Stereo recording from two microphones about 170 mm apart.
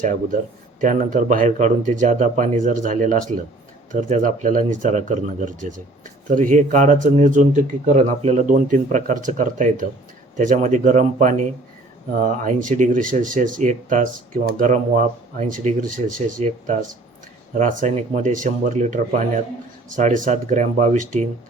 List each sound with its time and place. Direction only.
0.0 s speech: 50° right (ahead or behind)